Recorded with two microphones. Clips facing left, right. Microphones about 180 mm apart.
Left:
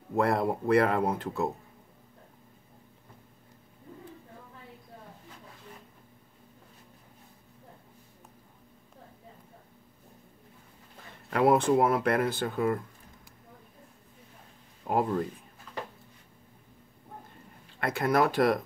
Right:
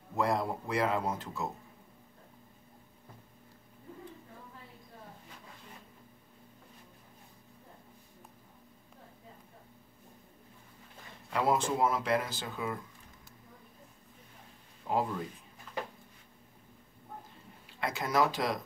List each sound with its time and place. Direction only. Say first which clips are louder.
0.1 s speech: left 5 dB; 60° left (ahead or behind)
11.2 s speech: left 7 dB; 60° left (ahead or behind)
14.9 s speech: left 5 dB; 55° left (ahead or behind)
17.7 s speech: left 4 dB; 55° left (ahead or behind)